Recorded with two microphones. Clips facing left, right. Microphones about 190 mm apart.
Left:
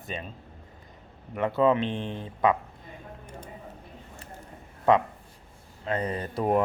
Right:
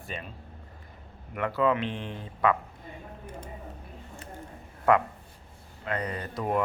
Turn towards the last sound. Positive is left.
turn(degrees=35)  # may be behind; listen again after turning